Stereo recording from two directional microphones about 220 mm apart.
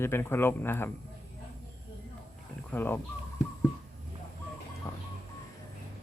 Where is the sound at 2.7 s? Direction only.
10° left (ahead or behind).